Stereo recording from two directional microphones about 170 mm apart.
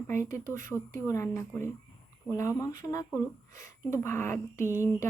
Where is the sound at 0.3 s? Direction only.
20° left (ahead or behind).